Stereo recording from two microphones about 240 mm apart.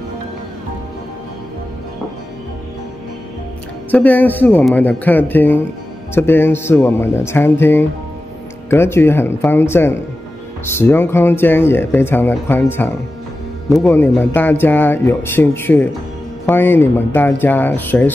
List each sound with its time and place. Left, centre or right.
3.9 s speech: centre